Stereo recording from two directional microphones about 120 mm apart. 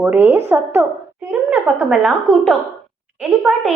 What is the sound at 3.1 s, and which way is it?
Speech, 10° right (ahead or behind).